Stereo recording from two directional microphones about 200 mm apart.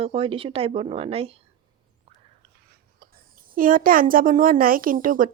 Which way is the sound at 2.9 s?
45° right (ahead or behind).